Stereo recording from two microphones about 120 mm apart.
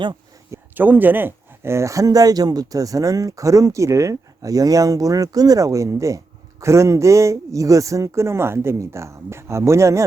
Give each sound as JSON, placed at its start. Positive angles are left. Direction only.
{"t": 0.5, "sound": "speech", "side_deg": -15}